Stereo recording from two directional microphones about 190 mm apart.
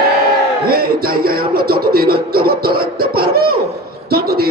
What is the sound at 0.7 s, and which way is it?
Music, 50° right (ahead or behind).